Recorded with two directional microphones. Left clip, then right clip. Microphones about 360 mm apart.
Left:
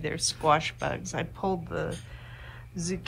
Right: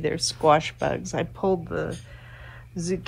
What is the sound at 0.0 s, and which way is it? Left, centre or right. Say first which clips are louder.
Speech: right 5 dB; centre.